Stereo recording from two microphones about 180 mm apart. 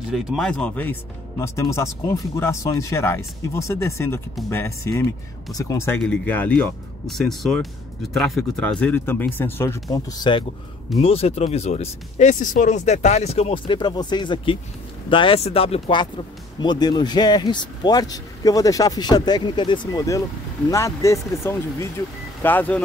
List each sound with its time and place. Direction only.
0.1 s speech: centre (ahead or behind)